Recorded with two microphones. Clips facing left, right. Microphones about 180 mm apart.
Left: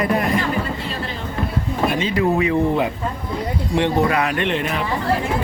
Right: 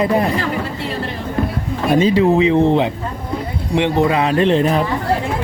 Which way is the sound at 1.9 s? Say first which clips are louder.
Right 8 dB; 40° right (ahead or behind).